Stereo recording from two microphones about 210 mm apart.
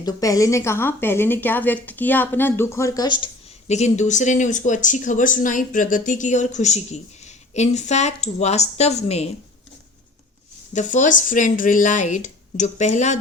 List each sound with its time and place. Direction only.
0.0 s a woman's voice: 15° left (ahead or behind)
3.7 s speech: 35° left (ahead or behind)
10.8 s speech: 35° left (ahead or behind)